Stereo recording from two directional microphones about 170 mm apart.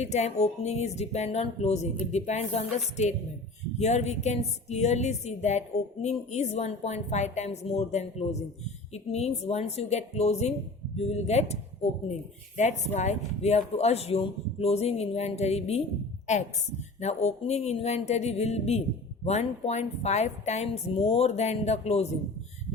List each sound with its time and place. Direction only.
0.0 s a woman's voice: 40° left (ahead or behind)
17.0 s a woman's voice: 40° left (ahead or behind)